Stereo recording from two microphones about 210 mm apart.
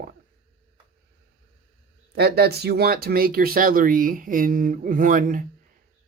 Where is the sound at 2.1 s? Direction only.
50° right (ahead or behind).